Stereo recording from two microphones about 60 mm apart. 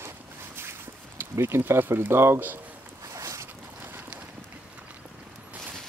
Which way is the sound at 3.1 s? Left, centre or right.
Right.